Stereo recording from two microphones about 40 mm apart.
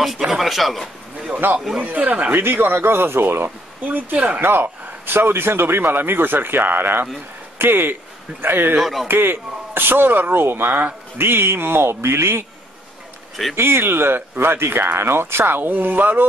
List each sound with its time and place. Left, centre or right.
0.3 s speech: centre
1.4 s a man's voice: right
1.8 s speech: right
2.3 s speech: right
3.4 s speech: right
4.4 s a man's voice: right
8.7 s speech: centre
9.0 s a man's voice: right
11.1 s speech: right
13.6 s a man's voice: right
15.0 s a man's voice: right